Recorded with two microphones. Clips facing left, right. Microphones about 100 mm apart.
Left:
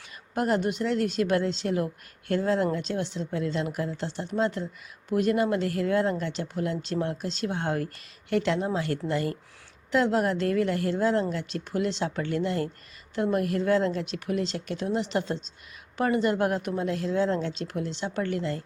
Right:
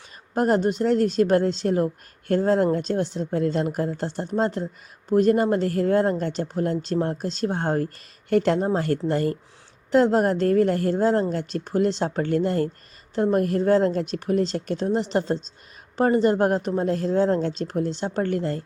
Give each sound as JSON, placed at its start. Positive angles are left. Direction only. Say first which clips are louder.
{"t": 0.3, "sound": "speech", "louder": "right 5 dB", "side_deg": -40}